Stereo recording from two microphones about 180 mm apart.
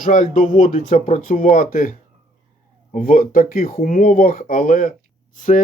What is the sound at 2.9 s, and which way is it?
Speech, 50° left (ahead or behind).